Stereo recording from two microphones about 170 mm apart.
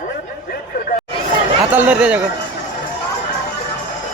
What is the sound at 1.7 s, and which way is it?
Speech, 10° right (ahead or behind).